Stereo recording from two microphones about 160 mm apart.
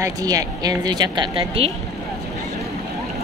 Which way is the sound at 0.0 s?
20° right (ahead or behind).